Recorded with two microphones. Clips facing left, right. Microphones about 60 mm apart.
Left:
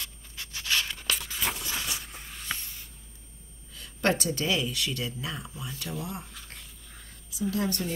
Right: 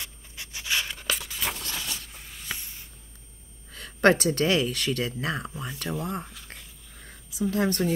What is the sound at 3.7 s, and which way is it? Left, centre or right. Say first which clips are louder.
Speech: right 7 dB; right.